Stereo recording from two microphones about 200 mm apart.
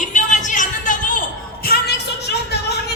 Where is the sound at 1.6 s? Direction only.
50° left (ahead or behind).